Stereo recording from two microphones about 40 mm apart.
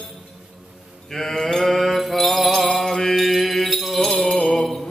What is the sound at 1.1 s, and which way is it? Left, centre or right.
Mantra, centre.